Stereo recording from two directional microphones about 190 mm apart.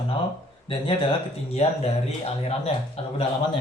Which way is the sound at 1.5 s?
30° left (ahead or behind).